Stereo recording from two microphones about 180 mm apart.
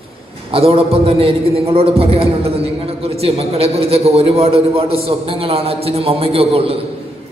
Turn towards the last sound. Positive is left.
turn(degrees=-30)  # may be behind; listen again after turning